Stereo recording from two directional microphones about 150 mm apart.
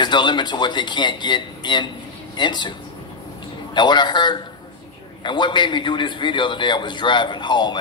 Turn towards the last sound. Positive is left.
turn(degrees=30)  # may be behind; listen again after turning